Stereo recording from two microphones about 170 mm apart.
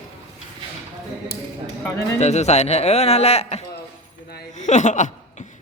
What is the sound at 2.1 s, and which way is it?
Speech, 40° left (ahead or behind).